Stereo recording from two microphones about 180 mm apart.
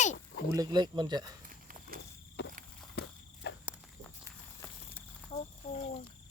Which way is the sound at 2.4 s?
70° left (ahead or behind).